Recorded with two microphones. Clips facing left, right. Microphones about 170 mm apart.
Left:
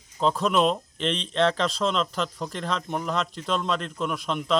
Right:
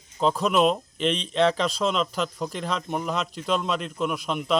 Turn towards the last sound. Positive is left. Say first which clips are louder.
# right 1 dB
turn(degrees=-5)  # may be behind; listen again after turning